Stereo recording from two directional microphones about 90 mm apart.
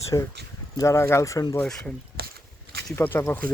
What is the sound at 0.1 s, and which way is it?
Speech, 45° left (ahead or behind).